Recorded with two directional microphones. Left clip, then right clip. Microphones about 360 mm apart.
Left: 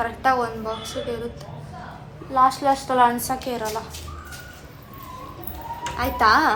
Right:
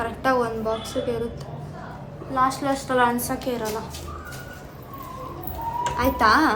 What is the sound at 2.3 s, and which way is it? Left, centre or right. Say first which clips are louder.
A woman's voice: left 4 dB; centre.